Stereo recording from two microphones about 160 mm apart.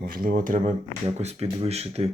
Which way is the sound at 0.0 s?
60° right (ahead or behind).